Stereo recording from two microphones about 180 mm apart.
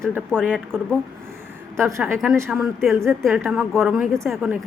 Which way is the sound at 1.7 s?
15° right (ahead or behind).